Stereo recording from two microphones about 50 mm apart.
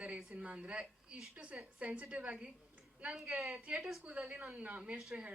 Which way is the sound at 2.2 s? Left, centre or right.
Right.